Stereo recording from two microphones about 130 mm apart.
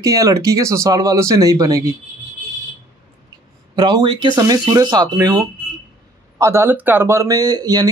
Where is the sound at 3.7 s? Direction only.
35° right (ahead or behind).